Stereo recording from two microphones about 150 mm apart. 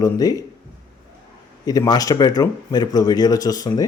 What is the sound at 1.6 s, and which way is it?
Speech, 25° left (ahead or behind).